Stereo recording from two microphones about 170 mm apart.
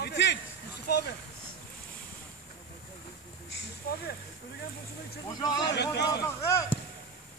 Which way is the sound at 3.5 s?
90° left.